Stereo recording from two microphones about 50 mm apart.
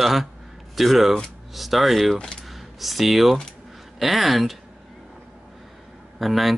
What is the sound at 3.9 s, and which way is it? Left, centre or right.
Speech, centre.